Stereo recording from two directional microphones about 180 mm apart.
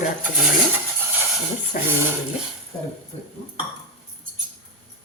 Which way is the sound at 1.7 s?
45° left (ahead or behind).